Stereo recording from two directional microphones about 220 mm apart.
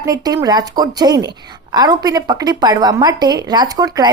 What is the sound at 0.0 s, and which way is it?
A woman's voice, 15° right (ahead or behind).